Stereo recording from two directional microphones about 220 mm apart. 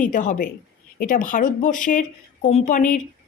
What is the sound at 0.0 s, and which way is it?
A woman's voice, 35° left (ahead or behind).